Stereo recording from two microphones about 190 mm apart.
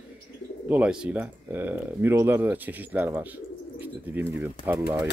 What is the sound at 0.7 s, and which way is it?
Speech, 5° right (ahead or behind).